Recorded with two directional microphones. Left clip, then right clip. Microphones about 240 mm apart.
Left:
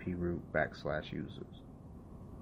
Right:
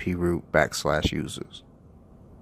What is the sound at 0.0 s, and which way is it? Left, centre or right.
Speech, right.